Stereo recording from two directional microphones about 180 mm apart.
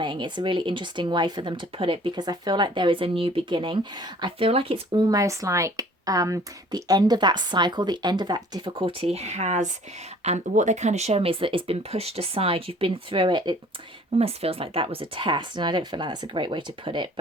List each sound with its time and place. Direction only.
0.0 s speech: 25° right (ahead or behind)
4.9 s speech: 20° right (ahead or behind)